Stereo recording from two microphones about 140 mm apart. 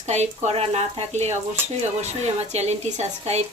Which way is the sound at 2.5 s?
55° right (ahead or behind).